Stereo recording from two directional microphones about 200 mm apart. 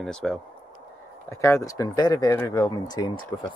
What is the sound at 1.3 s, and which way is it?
Speech, 15° left (ahead or behind).